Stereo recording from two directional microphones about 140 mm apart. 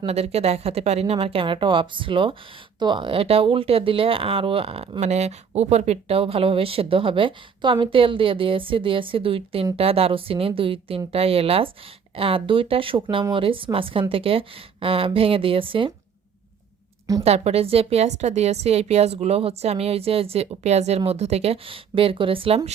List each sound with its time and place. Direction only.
0.0 s a woman's voice: 45° right (ahead or behind)
17.2 s a woman's voice: 50° right (ahead or behind)